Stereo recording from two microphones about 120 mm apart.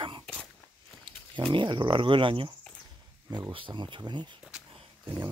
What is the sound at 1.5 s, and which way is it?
Speech, 40° right (ahead or behind).